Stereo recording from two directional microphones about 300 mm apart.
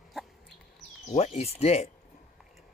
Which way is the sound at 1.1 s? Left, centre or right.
Left.